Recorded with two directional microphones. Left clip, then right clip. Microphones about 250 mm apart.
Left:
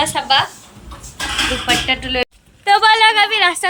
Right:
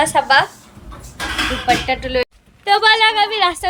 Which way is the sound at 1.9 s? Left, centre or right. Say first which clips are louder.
Even; centre.